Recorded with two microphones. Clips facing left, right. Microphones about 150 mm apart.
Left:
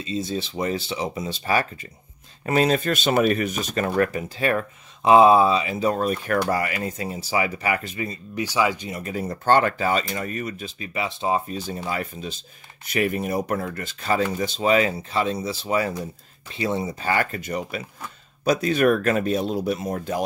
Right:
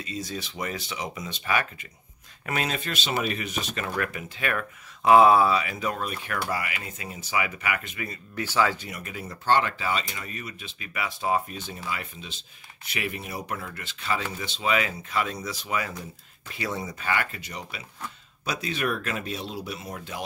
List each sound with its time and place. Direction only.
0.0 s speech: 25° left (ahead or behind)
8.9 s speech: 35° left (ahead or behind)
10.8 s speech: 25° left (ahead or behind)
11.5 s speech: 35° left (ahead or behind)